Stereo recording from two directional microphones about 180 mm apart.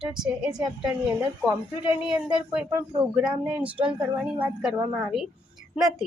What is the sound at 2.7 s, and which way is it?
A woman's voice, 15° right (ahead or behind).